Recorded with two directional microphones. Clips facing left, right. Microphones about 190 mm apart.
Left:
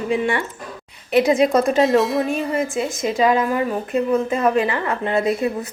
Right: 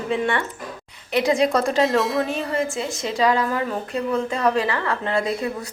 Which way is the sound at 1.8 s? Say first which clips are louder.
Left 3 dB; centre (ahead or behind).